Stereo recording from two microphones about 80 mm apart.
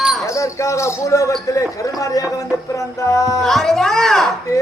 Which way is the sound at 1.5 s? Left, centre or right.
Left.